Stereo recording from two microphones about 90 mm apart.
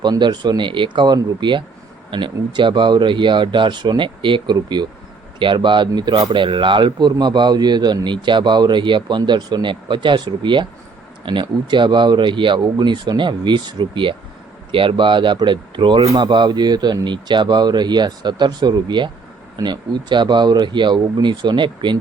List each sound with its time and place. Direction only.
0.0 s speech: 55° right (ahead or behind)